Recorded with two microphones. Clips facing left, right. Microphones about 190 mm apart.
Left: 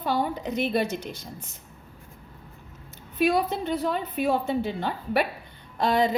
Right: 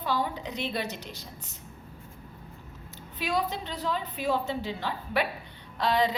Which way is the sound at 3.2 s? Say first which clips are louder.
Left 7 dB; 55° left (ahead or behind).